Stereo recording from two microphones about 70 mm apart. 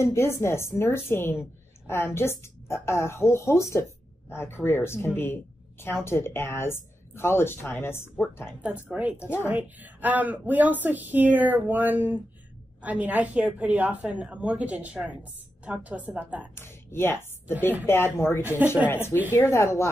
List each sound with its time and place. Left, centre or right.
0.0 s a woman's voice: left
8.5 s a woman's voice: right
9.2 s a woman's voice: left
9.5 s a woman's voice: right
16.5 s a woman's voice: left